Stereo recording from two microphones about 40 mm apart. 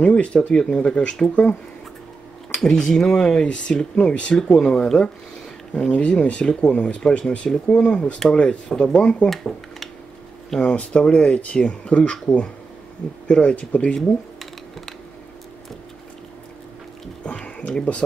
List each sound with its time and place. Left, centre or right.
0.0 s speech: left
0.6 s speech: centre
2.5 s speech: centre
4.6 s speech: centre
10.6 s speech: left
13.3 s speech: left
13.9 s a sound: centre
17.2 s a sound: left